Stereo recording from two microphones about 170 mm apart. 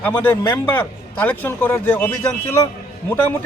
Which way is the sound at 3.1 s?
10° left (ahead or behind).